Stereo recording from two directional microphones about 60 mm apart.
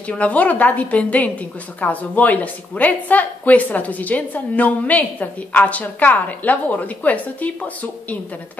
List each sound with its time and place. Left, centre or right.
0.1 s a woman's voice: left